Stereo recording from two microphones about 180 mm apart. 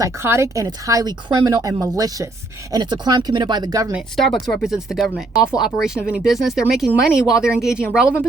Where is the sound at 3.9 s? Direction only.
Centre (ahead or behind).